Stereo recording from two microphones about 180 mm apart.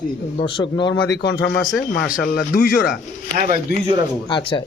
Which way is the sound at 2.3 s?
55° left (ahead or behind).